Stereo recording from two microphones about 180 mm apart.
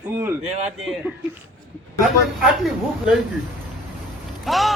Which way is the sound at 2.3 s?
Centre (ahead or behind).